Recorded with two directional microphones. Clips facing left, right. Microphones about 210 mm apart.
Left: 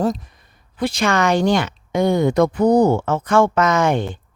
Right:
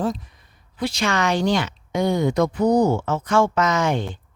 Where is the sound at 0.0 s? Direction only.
40° left (ahead or behind).